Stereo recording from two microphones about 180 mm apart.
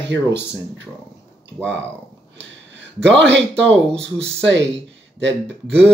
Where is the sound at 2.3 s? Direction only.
85° right.